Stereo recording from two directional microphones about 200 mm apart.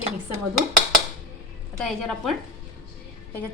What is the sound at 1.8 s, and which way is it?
Speech, centre (ahead or behind).